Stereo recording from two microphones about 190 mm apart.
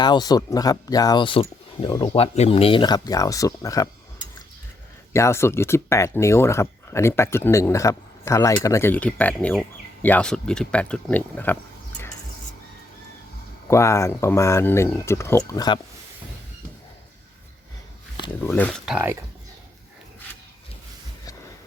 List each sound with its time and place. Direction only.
0.0 s speech: 20° left (ahead or behind)
5.1 s speech: 15° left (ahead or behind)
13.7 s speech: 15° left (ahead or behind)
18.3 s speech: 10° left (ahead or behind)
18.9 s speech: 10° right (ahead or behind)